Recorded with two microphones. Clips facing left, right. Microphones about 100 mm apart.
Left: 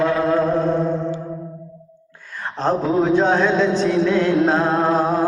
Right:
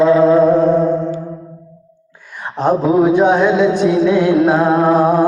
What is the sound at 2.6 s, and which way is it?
Music, 15° right (ahead or behind).